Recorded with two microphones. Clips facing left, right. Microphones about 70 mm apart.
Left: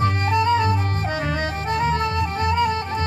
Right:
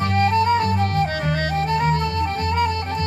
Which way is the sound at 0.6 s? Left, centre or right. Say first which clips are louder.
Right 2 dB; left.